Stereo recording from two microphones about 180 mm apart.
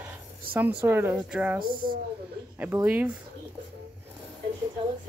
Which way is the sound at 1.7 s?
50° right (ahead or behind).